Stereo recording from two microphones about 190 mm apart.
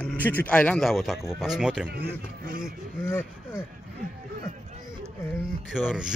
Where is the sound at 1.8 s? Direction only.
50° right (ahead or behind).